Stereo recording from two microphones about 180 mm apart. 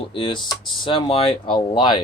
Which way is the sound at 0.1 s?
25° left (ahead or behind).